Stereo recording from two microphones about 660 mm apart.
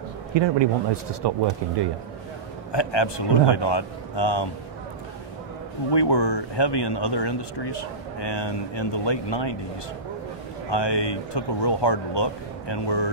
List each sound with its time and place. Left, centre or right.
0.3 s a man's voice: right
2.7 s speech: left
5.9 s speech: left
10.7 s speech: left